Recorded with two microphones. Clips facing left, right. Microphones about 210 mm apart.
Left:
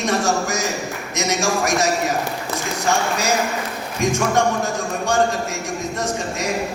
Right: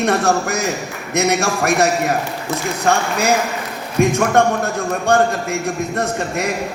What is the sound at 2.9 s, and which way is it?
A man's voice, 55° right (ahead or behind).